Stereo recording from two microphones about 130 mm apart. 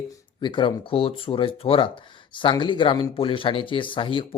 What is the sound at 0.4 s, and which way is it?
Speech, 40° left (ahead or behind).